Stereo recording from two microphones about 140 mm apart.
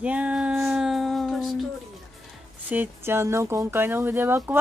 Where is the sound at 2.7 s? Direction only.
15° right (ahead or behind).